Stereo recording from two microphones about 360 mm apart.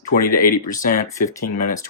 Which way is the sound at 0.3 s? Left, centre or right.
Left.